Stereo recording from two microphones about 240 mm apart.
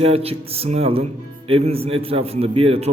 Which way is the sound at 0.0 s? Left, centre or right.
Right.